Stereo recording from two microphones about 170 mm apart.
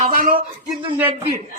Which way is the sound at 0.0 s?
55° right (ahead or behind).